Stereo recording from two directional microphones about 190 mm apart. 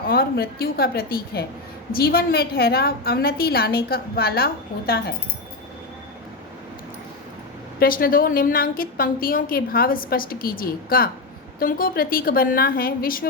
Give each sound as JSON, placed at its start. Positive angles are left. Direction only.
{"t": 0.1, "sound": "a woman's voice", "side_deg": 55}
{"t": 7.8, "sound": "a woman's voice", "side_deg": 50}